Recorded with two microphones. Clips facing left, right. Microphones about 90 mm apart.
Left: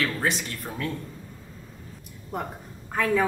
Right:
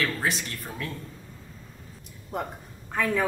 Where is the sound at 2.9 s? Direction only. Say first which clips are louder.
Left 2 dB; centre (ahead or behind).